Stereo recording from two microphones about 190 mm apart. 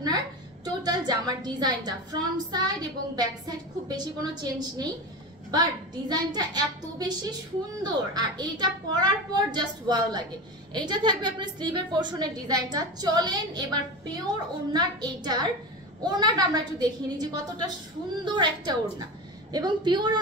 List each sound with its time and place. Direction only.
0.8 s speech: 20° right (ahead or behind)